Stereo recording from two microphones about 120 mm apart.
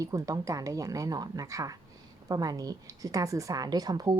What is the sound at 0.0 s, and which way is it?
A woman's voice, 30° right (ahead or behind).